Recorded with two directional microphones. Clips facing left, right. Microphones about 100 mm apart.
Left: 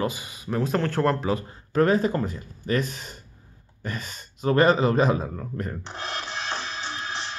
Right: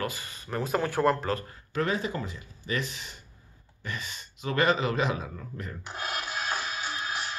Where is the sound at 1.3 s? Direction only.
25° left (ahead or behind).